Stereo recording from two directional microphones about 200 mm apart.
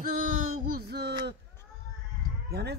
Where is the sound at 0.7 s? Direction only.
50° right (ahead or behind).